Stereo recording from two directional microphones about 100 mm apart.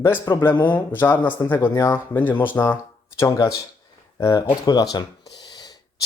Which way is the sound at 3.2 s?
40° left (ahead or behind).